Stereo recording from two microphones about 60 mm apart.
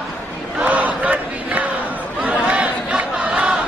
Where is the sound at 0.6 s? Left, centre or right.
Right.